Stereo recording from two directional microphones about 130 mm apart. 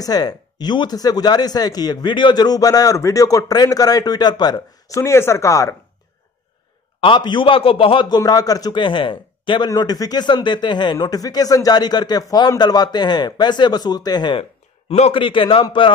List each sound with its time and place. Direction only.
0.0 s speech: 30° left (ahead or behind)
7.0 s speech: 40° left (ahead or behind)
14.9 s speech: 50° left (ahead or behind)